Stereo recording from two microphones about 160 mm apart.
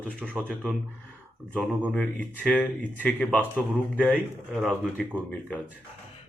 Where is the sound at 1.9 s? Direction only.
10° left (ahead or behind).